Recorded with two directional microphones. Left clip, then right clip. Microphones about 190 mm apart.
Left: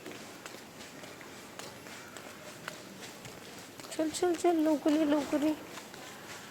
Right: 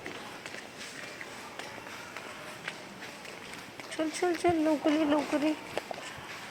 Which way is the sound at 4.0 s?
5° left (ahead or behind).